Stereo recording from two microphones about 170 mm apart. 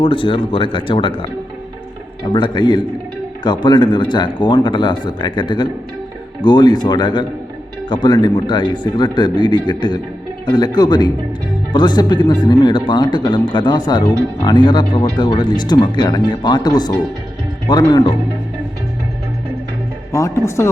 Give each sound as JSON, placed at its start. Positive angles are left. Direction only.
{"t": 0.0, "sound": "speech", "side_deg": 30}
{"t": 2.2, "sound": "speech", "side_deg": 25}
{"t": 20.1, "sound": "speech", "side_deg": 15}